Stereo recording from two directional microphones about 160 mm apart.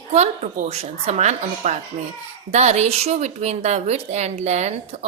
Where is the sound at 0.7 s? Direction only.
40° right (ahead or behind).